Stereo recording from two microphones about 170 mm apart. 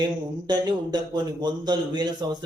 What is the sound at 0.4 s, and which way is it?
A man's voice, 25° right (ahead or behind).